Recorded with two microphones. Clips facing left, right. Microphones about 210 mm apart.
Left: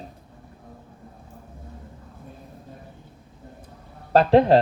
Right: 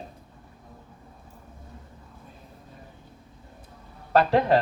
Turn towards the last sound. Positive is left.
turn(degrees=30)  # may be behind; listen again after turning